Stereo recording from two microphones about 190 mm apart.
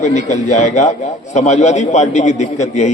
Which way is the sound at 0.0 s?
40° left (ahead or behind).